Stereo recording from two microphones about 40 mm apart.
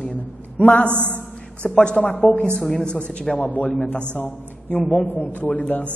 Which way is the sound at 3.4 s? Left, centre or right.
Left.